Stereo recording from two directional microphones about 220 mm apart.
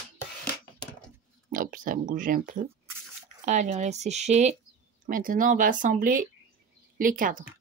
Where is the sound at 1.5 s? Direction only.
40° right (ahead or behind).